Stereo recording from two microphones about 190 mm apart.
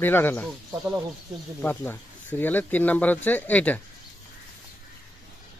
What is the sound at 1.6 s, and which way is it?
Speech, 10° left (ahead or behind).